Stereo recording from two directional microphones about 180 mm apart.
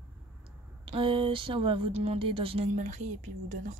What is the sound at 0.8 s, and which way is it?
Speech, 30° right (ahead or behind).